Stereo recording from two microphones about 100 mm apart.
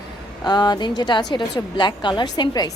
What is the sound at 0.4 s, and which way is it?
A woman's voice, 45° left (ahead or behind).